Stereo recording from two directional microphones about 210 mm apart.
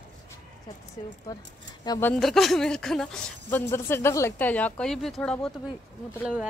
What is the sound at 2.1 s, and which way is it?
Speech, centre (ahead or behind).